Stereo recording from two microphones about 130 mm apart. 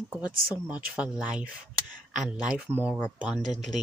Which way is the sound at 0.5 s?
10° right (ahead or behind).